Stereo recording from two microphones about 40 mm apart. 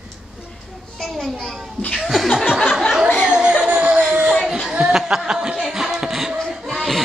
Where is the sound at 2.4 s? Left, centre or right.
Centre.